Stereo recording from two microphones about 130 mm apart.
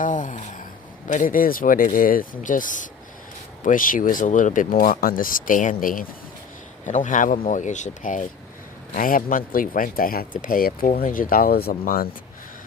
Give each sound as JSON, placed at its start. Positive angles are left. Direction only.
{"t": 0.0, "sound": "speech", "side_deg": 75}
{"t": 6.8, "sound": "speech", "side_deg": 70}
{"t": 9.0, "sound": "speech", "side_deg": 90}